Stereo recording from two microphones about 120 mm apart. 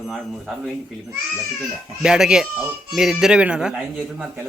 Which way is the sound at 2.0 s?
5° right (ahead or behind).